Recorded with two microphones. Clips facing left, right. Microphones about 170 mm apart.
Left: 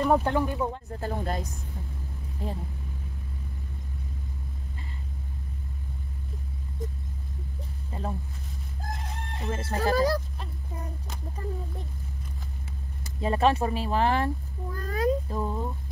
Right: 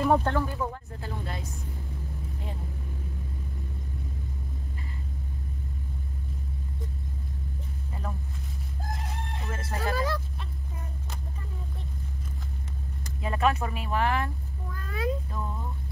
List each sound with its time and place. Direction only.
0.2 s speech: 15° left (ahead or behind)
1.0 s speech: 45° left (ahead or behind)
7.9 s speech: 30° left (ahead or behind)
9.5 s speech: 35° left (ahead or behind)
13.2 s speech: 30° left (ahead or behind)